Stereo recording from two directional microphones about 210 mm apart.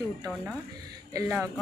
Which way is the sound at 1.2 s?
5° right (ahead or behind).